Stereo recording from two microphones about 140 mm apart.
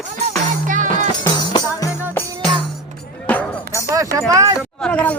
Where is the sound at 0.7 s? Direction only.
65° right (ahead or behind).